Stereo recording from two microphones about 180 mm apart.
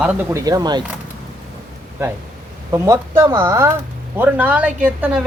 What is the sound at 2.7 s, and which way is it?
Speech, 15° right (ahead or behind).